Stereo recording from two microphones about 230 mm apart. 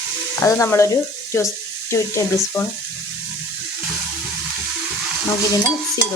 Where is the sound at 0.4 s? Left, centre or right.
Centre.